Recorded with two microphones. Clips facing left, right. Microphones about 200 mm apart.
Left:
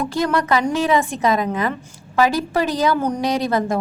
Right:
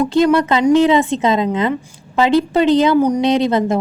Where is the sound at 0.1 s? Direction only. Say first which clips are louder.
Right 6 dB; 25° right (ahead or behind).